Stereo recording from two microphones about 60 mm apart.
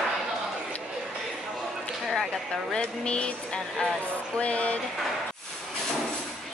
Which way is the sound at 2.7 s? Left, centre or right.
Centre.